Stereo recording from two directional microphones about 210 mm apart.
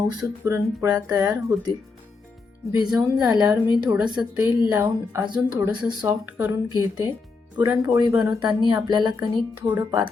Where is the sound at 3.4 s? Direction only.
15° right (ahead or behind).